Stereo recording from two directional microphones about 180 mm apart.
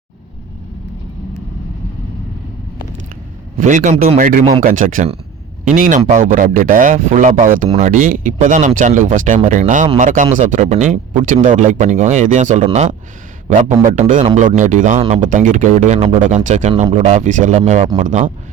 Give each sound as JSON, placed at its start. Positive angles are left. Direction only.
{"t": 3.6, "sound": "speech", "side_deg": -45}
{"t": 15.2, "sound": "speech", "side_deg": -45}
{"t": 16.2, "sound": "speech", "side_deg": -45}